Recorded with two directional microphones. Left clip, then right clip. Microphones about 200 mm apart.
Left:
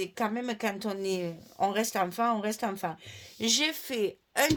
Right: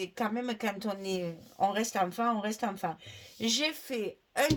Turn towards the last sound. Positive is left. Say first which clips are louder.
# left 3 dB
turn(degrees=40)  # may be behind; listen again after turning